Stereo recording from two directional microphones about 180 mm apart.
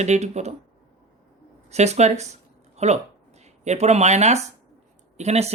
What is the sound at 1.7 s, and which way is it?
Speech, 35° right (ahead or behind).